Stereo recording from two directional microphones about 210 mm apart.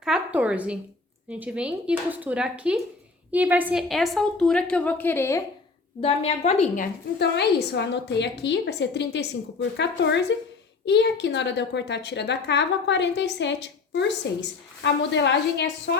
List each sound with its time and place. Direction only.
0.0 s a woman's voice: 5° right (ahead or behind); by 5.4 s 10° left (ahead or behind)
6.0 s a woman's voice: 30° left (ahead or behind)
7.2 s a woman's voice: 50° left (ahead or behind)